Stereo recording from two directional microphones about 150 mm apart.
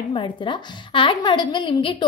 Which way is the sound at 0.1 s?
35° left (ahead or behind).